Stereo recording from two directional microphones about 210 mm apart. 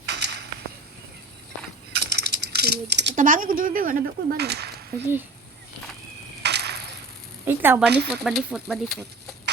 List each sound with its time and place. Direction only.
0.0 s a sound: 55° right (ahead or behind)
1.9 s coin: 50° right (ahead or behind)
3.2 s speech: 40° right (ahead or behind)
6.4 s a sound: 50° right (ahead or behind)
7.4 s speech: 10° right (ahead or behind)
8.0 s speech: centre (ahead or behind)